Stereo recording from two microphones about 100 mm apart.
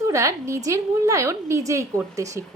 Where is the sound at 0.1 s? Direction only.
30° right (ahead or behind).